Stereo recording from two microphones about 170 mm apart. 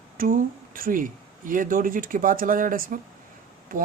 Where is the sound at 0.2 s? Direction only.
55° right (ahead or behind).